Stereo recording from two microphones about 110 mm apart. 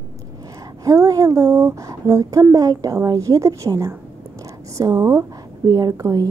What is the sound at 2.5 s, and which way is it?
A woman's voice, 35° right (ahead or behind).